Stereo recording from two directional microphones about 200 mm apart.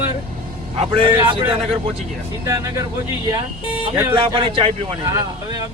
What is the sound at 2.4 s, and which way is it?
Speech, 15° right (ahead or behind).